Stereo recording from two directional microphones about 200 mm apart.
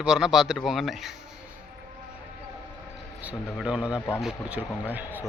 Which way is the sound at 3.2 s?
5° right (ahead or behind).